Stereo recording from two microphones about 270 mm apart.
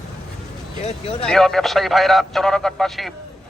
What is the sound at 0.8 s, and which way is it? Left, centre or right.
Speech, left.